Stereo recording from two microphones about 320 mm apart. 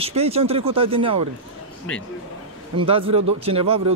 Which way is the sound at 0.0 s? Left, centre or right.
Centre.